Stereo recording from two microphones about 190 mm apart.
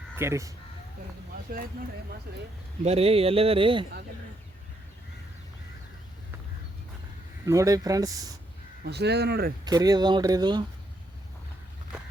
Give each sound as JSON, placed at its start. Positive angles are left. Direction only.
{"t": 0.2, "sound": "speech", "side_deg": -15}
{"t": 2.8, "sound": "speech", "side_deg": -30}
{"t": 7.4, "sound": "speech", "side_deg": -15}
{"t": 8.8, "sound": "speech", "side_deg": -60}
{"t": 9.6, "sound": "speech", "side_deg": -20}